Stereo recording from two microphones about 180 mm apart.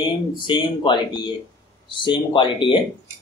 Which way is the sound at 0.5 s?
25° left (ahead or behind).